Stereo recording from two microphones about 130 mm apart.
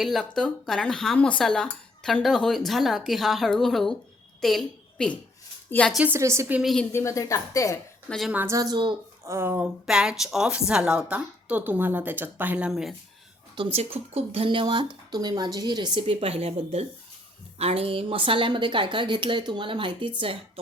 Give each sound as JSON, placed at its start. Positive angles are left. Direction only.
{"t": 0.0, "sound": "a woman's voice", "side_deg": 0}
{"t": 5.7, "sound": "a woman's voice", "side_deg": 15}
{"t": 6.1, "sound": "speech", "side_deg": -20}
{"t": 6.6, "sound": "speech", "side_deg": 0}
{"t": 6.9, "sound": "speech", "side_deg": 25}
{"t": 8.3, "sound": "a woman's voice", "side_deg": -15}
{"t": 8.5, "sound": "speech", "side_deg": -30}
{"t": 9.2, "sound": "a woman's voice", "side_deg": -20}
{"t": 13.6, "sound": "speech", "side_deg": -45}